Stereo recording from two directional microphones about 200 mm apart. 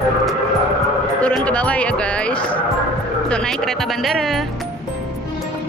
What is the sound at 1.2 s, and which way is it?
Speech, 5° left (ahead or behind).